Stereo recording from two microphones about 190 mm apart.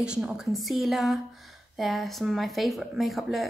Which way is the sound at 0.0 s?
5° right (ahead or behind).